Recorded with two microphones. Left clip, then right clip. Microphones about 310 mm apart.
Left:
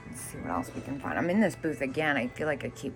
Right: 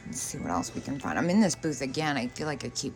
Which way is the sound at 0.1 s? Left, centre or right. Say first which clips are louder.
Right 3 dB; centre.